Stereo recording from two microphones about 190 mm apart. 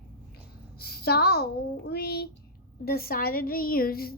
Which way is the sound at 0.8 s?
55° left (ahead or behind).